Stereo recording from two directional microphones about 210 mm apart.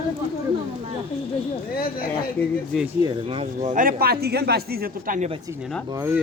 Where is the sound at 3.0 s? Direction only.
25° right (ahead or behind).